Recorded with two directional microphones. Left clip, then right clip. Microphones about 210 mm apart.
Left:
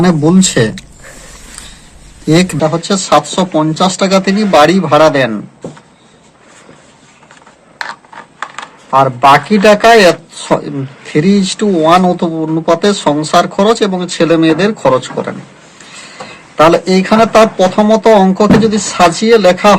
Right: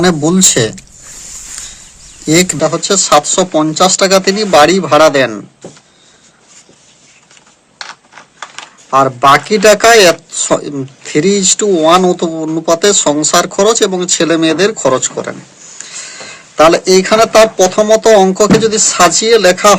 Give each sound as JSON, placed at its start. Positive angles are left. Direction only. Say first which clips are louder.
{"t": 0.0, "sound": "speech", "louder": "even", "side_deg": -45}
{"t": 2.2, "sound": "speech", "louder": "even", "side_deg": -40}
{"t": 8.4, "sound": "coin", "louder": "left 4 dB", "side_deg": 5}
{"t": 8.9, "sound": "speech", "louder": "left 1 dB", "side_deg": -55}